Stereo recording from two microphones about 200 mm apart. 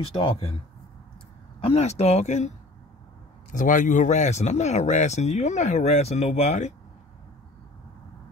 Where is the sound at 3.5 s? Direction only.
40° left (ahead or behind).